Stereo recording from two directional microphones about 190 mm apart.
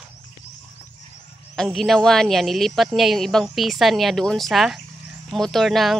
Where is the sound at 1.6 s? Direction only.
Centre (ahead or behind).